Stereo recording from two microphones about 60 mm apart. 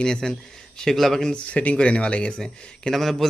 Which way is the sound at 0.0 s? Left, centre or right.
Centre.